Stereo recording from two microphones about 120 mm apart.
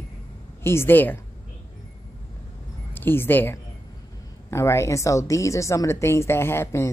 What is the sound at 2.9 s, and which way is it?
Speech, 20° left (ahead or behind).